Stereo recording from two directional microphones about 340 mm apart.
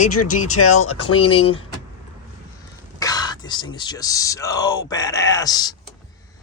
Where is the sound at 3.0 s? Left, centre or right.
Centre.